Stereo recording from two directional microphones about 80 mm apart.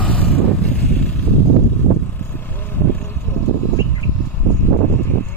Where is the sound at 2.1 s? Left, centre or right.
Left.